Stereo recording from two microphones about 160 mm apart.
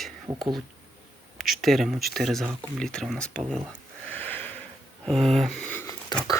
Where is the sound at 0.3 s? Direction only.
20° right (ahead or behind).